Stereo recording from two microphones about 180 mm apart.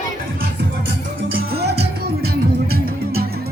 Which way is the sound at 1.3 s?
65° right (ahead or behind).